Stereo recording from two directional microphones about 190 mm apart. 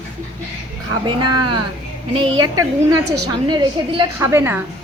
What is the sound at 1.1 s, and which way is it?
Speech, 25° right (ahead or behind).